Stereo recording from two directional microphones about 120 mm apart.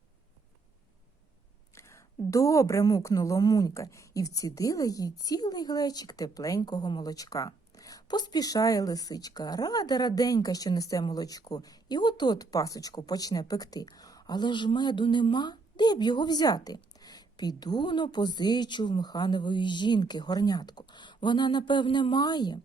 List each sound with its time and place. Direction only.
1.7 s a woman's voice: 25° left (ahead or behind)